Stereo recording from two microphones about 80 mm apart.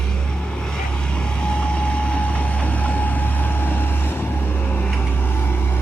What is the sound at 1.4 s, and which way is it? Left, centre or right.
Vehicle, centre.